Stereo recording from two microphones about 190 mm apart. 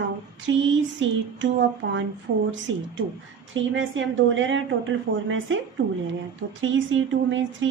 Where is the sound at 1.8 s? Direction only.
80° right.